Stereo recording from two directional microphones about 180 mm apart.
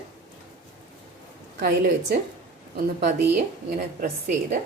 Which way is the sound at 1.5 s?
65° right (ahead or behind).